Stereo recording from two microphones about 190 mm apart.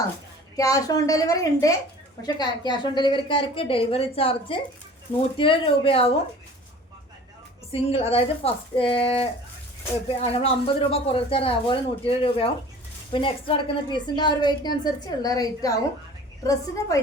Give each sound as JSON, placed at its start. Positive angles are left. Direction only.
{"t": 0.5, "sound": "a woman's voice", "side_deg": 20}
{"t": 7.7, "sound": "a woman's voice", "side_deg": 30}